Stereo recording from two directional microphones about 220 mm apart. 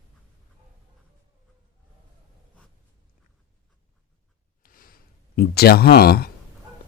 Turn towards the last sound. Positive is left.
turn(degrees=45)  # may be behind; listen again after turning